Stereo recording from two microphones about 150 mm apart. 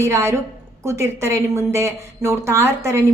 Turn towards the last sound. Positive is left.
turn(degrees=-20)  # may be behind; listen again after turning